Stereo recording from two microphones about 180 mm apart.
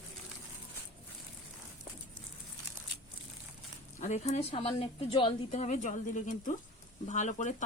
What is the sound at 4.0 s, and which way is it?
A woman's voice, 40° left (ahead or behind).